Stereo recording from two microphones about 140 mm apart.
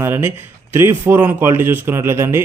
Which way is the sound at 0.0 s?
15° right (ahead or behind).